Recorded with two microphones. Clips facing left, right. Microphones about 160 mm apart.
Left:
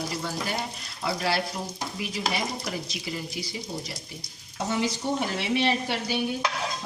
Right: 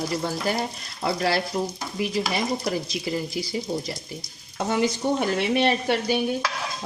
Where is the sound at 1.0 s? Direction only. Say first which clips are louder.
Right 4 dB; 45° right (ahead or behind).